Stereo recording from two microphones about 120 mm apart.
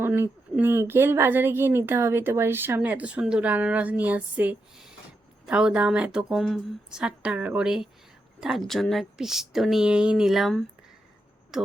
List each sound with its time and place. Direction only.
0.0 s a woman's voice: 15° right (ahead or behind); by 10.7 s centre (ahead or behind)